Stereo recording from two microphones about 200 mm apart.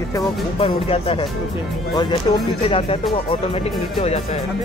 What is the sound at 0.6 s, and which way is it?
Speech, 30° left (ahead or behind).